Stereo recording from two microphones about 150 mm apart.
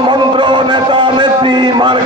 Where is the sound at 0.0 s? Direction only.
35° right (ahead or behind).